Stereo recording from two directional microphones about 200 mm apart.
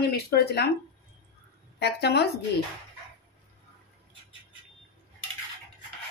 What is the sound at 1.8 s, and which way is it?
Speech, 55° left (ahead or behind).